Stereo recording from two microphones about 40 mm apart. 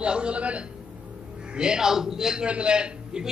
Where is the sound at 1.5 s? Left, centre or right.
Right.